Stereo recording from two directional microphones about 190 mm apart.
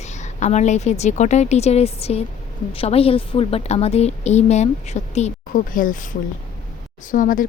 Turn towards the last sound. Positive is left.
turn(degrees=45)  # may be behind; listen again after turning